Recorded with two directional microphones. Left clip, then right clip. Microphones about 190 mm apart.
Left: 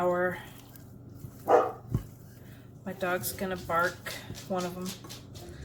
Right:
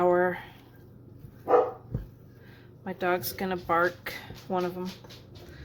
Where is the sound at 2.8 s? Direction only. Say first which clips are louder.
Right 3 dB; 45° right (ahead or behind).